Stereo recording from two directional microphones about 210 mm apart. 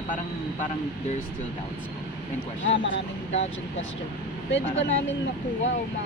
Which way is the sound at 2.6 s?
65° left (ahead or behind).